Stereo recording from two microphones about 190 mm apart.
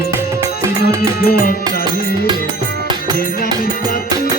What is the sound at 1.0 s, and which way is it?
Music, 50° left (ahead or behind).